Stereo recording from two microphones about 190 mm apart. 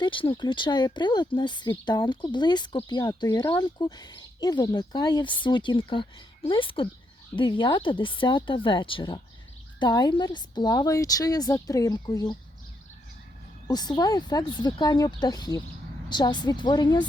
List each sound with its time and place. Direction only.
0.0 s speech: 25° left (ahead or behind)
13.7 s speech: 20° left (ahead or behind)